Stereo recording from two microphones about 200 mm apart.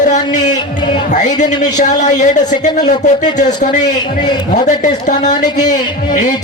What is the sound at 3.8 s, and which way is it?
Speech, 20° left (ahead or behind).